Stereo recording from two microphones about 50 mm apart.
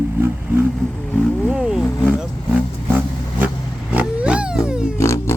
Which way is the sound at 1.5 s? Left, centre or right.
Centre.